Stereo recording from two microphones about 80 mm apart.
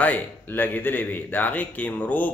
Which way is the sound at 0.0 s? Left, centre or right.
Left.